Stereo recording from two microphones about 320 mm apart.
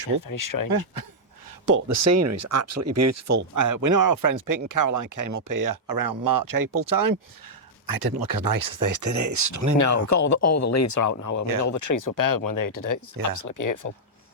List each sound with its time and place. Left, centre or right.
0.3 s speech: left
0.9 s speech: right
1.6 s speech: right
9.7 s speech: left
13.3 s speech: left